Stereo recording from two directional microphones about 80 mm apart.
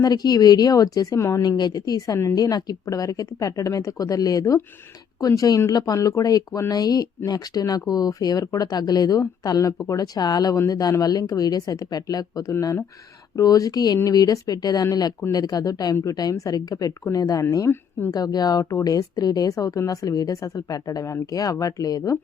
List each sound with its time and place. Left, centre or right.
0.0 s speech: left
1.4 s speech: left
12.5 s speech: left
13.3 s speech: left
17.7 s speech: left
18.1 s speech: left